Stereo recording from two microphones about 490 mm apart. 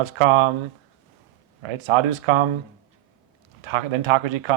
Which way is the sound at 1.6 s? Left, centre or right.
Right.